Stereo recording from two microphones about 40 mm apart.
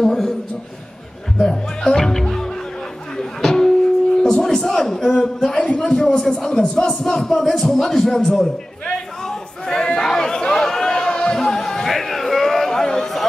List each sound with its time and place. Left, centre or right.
0.0 s a man's voice: centre
1.4 s speech: centre
3.3 s a sound: centre
5.9 s speech: left
9.2 s chatter: centre
10.0 s a sound: centre